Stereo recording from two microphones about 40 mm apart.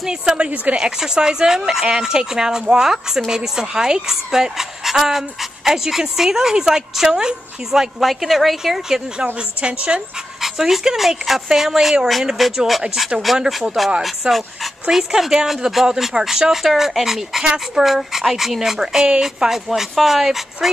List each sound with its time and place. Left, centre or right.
0.0 s a woman's voice: centre
8.0 s a woman's voice: centre
9.4 s a woman's voice: right
10.4 s a woman's voice: centre
18.8 s speech: centre